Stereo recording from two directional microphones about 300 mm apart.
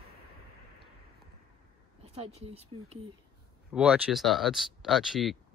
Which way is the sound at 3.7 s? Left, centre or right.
Centre.